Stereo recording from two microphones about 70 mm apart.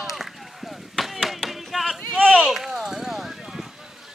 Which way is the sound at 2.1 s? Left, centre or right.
Centre.